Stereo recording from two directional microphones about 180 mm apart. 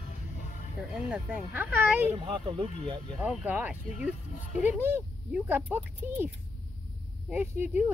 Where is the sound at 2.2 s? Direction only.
30° right (ahead or behind).